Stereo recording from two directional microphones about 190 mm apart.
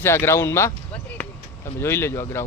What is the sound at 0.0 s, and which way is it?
Speech, 15° left (ahead or behind).